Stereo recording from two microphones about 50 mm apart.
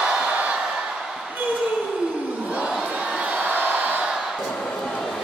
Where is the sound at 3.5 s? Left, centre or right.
Right.